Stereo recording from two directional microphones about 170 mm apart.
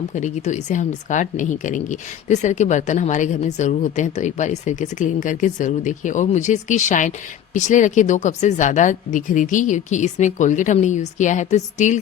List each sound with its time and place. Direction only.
0.1 s speech: 45° left (ahead or behind)